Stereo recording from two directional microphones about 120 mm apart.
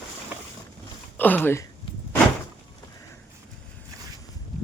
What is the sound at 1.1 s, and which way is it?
Speech, 15° left (ahead or behind).